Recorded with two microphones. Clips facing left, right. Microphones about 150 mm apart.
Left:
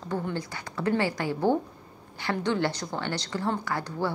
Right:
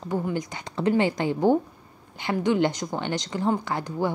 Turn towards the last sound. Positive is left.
turn(degrees=-20)  # may be behind; listen again after turning